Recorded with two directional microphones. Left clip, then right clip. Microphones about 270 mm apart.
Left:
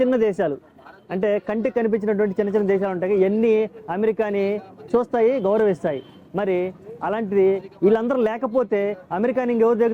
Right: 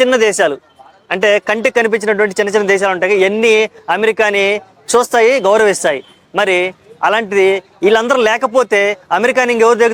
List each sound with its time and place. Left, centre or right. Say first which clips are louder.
0.0 s a man's voice: right 9 dB; centre